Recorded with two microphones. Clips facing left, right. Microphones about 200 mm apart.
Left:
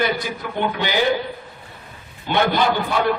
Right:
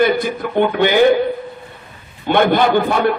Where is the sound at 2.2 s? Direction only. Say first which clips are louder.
Right 5 dB; 55° right (ahead or behind).